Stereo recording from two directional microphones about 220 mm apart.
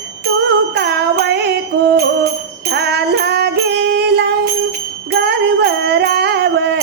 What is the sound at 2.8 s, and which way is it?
Music, 50° right (ahead or behind).